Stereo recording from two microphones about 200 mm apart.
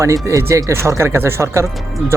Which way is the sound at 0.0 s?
15° right (ahead or behind).